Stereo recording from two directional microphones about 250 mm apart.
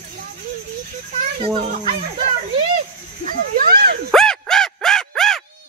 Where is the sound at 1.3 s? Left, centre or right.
Right.